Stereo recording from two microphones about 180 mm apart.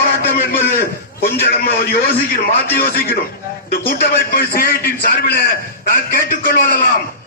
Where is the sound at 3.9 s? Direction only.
55° left (ahead or behind).